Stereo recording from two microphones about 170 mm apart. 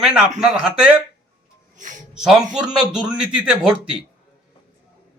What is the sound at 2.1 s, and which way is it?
A man's voice, 5° right (ahead or behind).